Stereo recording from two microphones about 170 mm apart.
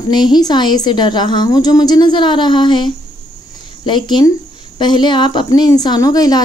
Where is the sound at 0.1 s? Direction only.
25° left (ahead or behind).